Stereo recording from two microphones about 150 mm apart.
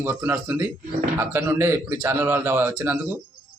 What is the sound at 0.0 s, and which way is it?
Speech, 15° right (ahead or behind).